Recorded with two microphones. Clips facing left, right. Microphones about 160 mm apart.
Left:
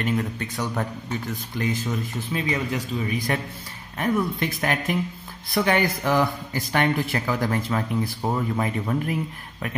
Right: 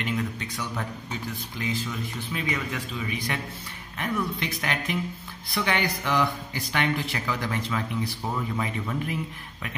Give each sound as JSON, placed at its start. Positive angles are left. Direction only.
{"t": 0.0, "sound": "a man's voice", "side_deg": 45}
{"t": 2.4, "sound": "a man's voice", "side_deg": 30}